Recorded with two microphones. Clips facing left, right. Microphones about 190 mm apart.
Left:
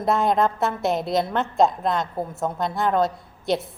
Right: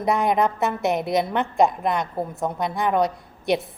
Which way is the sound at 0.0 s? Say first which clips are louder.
Even; 15° right (ahead or behind).